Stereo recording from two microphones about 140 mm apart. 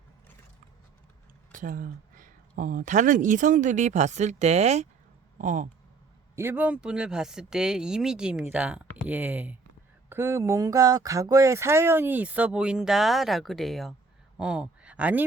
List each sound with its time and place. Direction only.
1.5 s speech: 75° right (ahead or behind); by 4.9 s 50° right (ahead or behind)
5.4 s speech: 65° right (ahead or behind)
6.3 s speech: 15° right (ahead or behind)